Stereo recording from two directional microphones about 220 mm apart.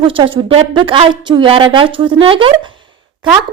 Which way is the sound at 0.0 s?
25° right (ahead or behind).